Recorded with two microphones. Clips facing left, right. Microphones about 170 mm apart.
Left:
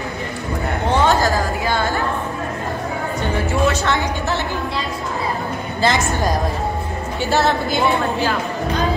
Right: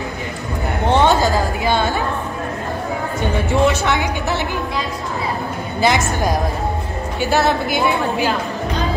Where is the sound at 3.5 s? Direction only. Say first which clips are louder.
Right 3 dB; 15° right (ahead or behind).